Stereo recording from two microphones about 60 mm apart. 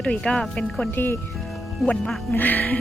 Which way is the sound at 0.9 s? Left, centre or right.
Left.